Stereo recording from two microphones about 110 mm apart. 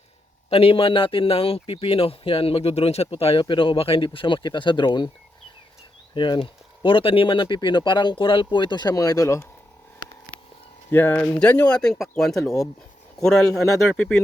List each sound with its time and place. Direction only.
0.5 s a man's voice: 60° left (ahead or behind)
3.4 s speech: 50° left (ahead or behind)
6.1 s speech: 50° left (ahead or behind); by 9.5 s 25° left (ahead or behind)
10.9 s speech: 15° left (ahead or behind)